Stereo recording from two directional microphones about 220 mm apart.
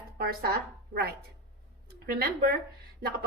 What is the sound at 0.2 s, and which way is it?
Speech, 45° right (ahead or behind).